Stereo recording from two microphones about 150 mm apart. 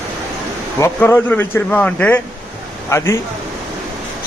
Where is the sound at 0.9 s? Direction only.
10° left (ahead or behind).